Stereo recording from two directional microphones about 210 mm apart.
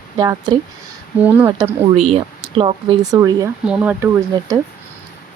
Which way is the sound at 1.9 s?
30° right (ahead or behind).